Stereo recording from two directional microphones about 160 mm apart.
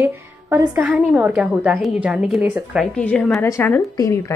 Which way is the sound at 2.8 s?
10° left (ahead or behind).